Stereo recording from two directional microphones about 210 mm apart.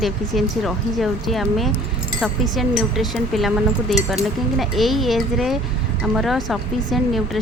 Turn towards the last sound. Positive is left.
turn(degrees=0)  # may be behind; listen again after turning